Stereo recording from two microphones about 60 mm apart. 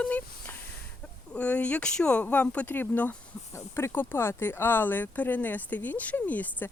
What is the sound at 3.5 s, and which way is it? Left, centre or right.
Speech, left.